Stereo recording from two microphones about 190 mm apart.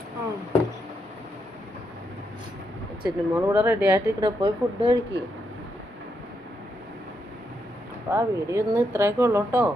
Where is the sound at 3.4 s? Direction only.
10° right (ahead or behind).